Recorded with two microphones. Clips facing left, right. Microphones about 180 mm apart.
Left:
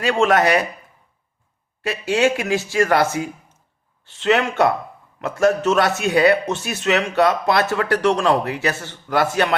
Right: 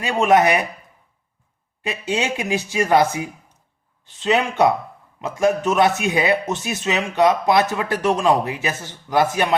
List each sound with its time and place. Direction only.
0.0 s speech: 20° right (ahead or behind)
1.8 s speech: 20° right (ahead or behind)